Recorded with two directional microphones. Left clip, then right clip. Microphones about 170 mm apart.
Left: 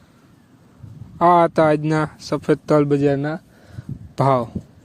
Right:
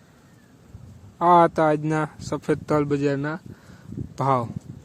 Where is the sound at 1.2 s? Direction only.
30° left (ahead or behind).